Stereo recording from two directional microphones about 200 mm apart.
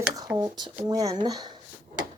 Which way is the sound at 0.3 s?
20° right (ahead or behind).